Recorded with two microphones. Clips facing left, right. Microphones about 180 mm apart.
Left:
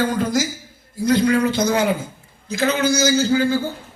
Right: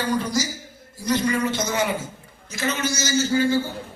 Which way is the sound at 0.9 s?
60° left (ahead or behind).